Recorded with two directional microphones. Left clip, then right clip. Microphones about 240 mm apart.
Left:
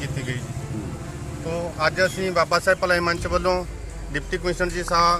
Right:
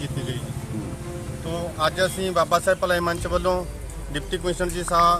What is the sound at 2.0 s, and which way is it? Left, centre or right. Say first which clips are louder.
Speech: even; centre.